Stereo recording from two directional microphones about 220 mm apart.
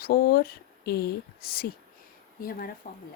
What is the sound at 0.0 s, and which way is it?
Speech, 45° left (ahead or behind).